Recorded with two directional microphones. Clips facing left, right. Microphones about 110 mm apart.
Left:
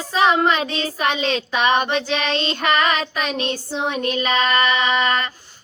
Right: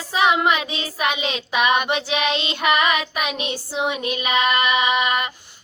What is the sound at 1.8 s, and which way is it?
Female singing, 15° right (ahead or behind).